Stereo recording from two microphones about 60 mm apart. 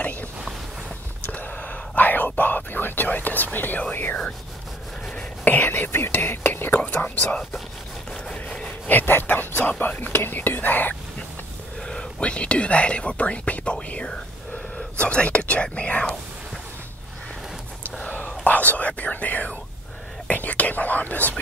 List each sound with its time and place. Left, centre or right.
0.0 s a sound: left
1.3 s whispering: left
3.9 s speech: left
8.4 s a sound: centre
8.8 s speech: left
11.8 s speech: centre
18.4 s speech: left